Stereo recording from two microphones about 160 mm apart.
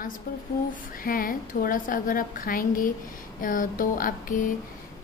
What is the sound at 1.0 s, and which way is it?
A woman's voice, 60° left (ahead or behind).